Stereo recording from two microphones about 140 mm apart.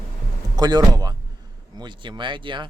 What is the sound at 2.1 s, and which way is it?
Speech, 35° right (ahead or behind).